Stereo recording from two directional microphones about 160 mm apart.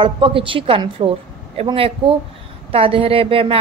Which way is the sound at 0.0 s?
30° right (ahead or behind).